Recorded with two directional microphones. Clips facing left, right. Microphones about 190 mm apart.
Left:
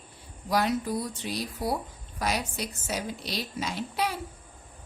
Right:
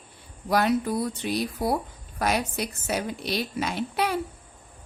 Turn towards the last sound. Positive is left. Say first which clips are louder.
# right 4 dB
turn(degrees=-60)  # may be behind; listen again after turning